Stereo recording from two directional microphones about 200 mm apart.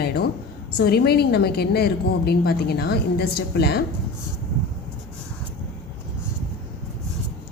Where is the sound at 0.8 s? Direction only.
50° left (ahead or behind).